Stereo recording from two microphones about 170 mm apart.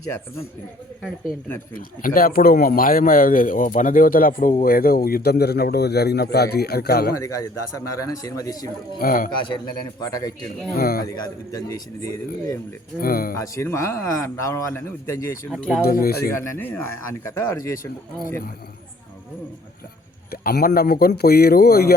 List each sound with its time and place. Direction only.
1.7 s a man's voice: 55° left (ahead or behind)
7.2 s speech: 20° left (ahead or behind)
9.0 s a man's voice: 55° left (ahead or behind)
10.0 s speech: 20° left (ahead or behind)
10.8 s a man's voice: 60° left (ahead or behind)
11.0 s speech: 20° left (ahead or behind)
13.0 s a man's voice: 60° left (ahead or behind)
13.3 s a man's voice: 15° left (ahead or behind)
15.9 s a man's voice: 60° left (ahead or behind)
16.3 s a man's voice: 10° left (ahead or behind)
20.3 s a man's voice: 65° left (ahead or behind)